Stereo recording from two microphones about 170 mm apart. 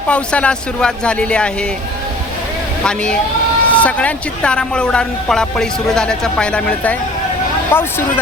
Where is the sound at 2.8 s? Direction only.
5° left (ahead or behind).